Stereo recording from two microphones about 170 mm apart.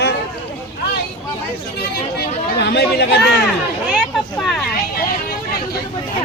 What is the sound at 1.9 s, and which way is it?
Speech, 70° left (ahead or behind).